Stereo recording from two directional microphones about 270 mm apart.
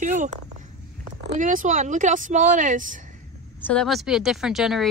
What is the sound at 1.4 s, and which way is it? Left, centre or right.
Speech, right.